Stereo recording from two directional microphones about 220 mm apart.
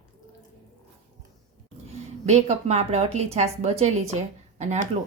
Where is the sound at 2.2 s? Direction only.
30° right (ahead or behind).